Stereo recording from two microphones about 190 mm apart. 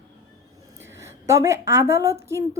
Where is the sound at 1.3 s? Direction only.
15° right (ahead or behind).